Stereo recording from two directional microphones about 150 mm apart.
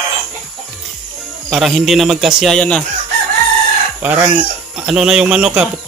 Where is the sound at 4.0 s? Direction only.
10° right (ahead or behind).